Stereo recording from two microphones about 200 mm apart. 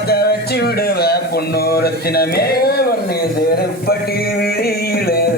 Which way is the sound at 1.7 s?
50° left (ahead or behind).